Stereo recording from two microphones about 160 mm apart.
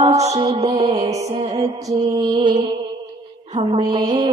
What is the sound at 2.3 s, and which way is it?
Music, 30° right (ahead or behind).